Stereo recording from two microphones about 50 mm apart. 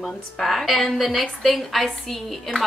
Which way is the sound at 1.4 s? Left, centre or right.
Centre.